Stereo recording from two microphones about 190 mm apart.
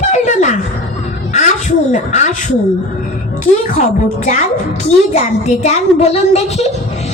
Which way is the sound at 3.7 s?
40° left (ahead or behind).